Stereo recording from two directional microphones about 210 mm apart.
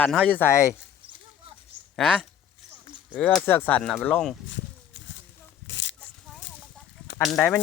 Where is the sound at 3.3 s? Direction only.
10° left (ahead or behind).